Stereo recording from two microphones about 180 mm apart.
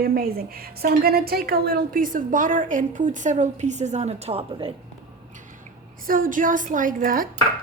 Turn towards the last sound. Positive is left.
turn(degrees=-50)  # may be behind; listen again after turning